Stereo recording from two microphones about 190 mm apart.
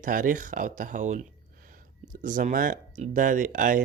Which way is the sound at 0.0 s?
45° right (ahead or behind).